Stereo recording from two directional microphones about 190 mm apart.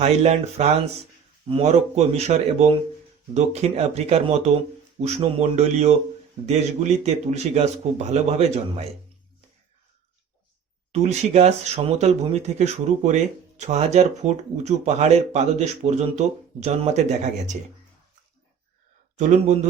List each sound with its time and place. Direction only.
0.0 s speech: 35° right (ahead or behind)
10.9 s speech: 35° right (ahead or behind)
19.2 s speech: 40° right (ahead or behind)